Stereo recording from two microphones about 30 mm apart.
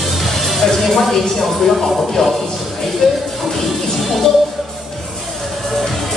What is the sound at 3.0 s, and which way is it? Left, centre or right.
Speech, centre.